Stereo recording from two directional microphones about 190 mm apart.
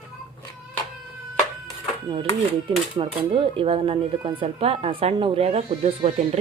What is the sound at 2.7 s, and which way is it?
Speech, 25° right (ahead or behind).